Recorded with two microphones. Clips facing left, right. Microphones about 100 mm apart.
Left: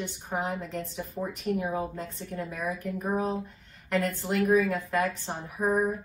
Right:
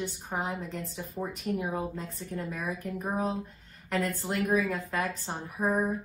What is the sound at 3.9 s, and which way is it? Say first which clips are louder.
Speech: left 3 dB; centre (ahead or behind).